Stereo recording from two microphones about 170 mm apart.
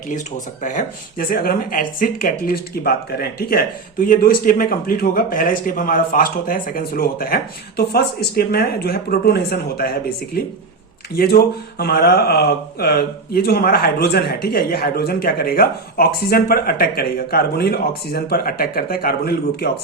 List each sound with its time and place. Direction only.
0.1 s speech: 50° left (ahead or behind); by 19.7 s 65° left (ahead or behind)